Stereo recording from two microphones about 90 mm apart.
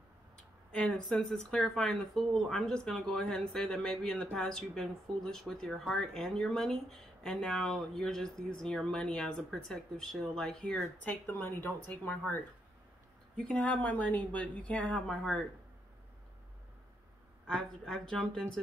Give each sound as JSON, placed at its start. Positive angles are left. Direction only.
{"t": 0.7, "sound": "speech", "side_deg": 10}
{"t": 17.5, "sound": "speech", "side_deg": 10}